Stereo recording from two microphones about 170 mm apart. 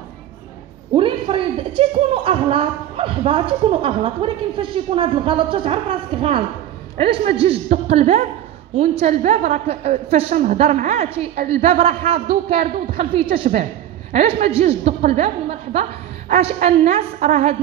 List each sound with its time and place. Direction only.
0.9 s a man's voice: 30° right (ahead or behind)
10.3 s a woman's voice: 50° right (ahead or behind)